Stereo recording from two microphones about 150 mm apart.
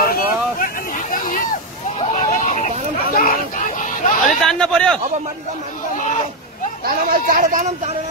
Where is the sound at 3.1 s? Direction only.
65° left (ahead or behind).